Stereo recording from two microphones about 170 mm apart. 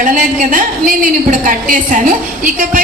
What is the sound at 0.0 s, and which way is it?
A woman's voice, 55° right (ahead or behind).